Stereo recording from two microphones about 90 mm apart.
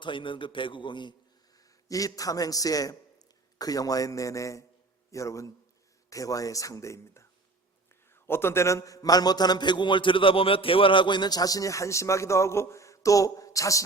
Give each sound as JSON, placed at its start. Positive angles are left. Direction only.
{"t": 0.0, "sound": "a man's voice", "side_deg": 65}
{"t": 1.9, "sound": "a man's voice", "side_deg": 40}